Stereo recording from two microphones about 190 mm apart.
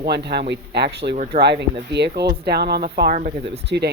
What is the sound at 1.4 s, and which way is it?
Speech, 60° right (ahead or behind).